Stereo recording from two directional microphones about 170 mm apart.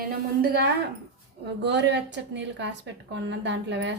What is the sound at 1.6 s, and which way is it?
A woman's voice, 90° right.